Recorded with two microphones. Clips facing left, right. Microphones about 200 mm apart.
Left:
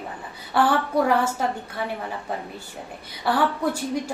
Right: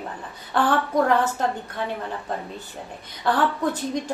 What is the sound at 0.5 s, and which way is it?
A woman's voice, 10° left (ahead or behind).